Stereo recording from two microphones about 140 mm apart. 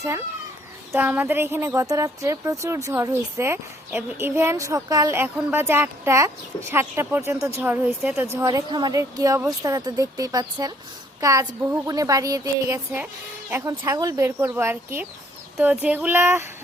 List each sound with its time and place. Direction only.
0.9 s a woman's voice: 10° right (ahead or behind)
8.4 s a woman's voice: 25° right (ahead or behind)